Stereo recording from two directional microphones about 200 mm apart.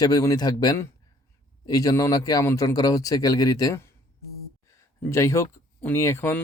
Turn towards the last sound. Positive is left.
turn(degrees=15)  # may be behind; listen again after turning